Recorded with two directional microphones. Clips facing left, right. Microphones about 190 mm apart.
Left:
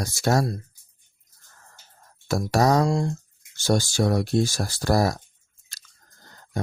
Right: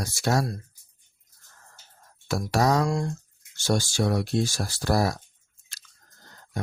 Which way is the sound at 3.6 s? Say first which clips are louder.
Left 3 dB; 40° left (ahead or behind).